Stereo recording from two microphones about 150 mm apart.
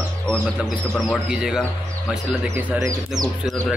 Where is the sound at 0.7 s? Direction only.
5° left (ahead or behind).